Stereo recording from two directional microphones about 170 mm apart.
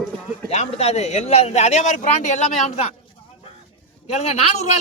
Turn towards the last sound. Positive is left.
turn(degrees=40)  # may be behind; listen again after turning